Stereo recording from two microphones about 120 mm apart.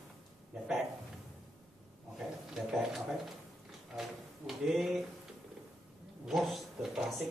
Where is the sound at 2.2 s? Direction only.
Centre (ahead or behind).